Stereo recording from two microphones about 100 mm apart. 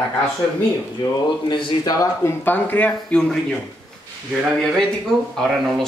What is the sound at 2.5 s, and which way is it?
Speech, 15° left (ahead or behind).